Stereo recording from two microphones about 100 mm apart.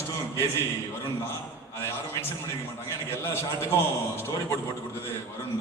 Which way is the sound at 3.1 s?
25° left (ahead or behind).